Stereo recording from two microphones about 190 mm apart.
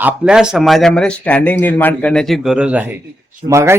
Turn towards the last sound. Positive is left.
turn(degrees=-15)  # may be behind; listen again after turning